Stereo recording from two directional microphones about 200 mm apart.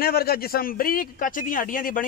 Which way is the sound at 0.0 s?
50° left (ahead or behind).